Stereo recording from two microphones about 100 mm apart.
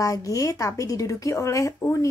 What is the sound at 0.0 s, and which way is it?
Speech, 35° left (ahead or behind).